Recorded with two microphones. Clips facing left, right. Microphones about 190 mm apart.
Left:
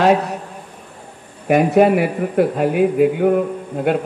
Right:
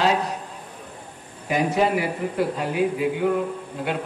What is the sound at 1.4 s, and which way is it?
Speech, 60° left (ahead or behind).